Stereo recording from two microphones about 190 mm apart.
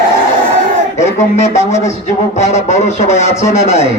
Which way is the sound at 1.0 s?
35° left (ahead or behind).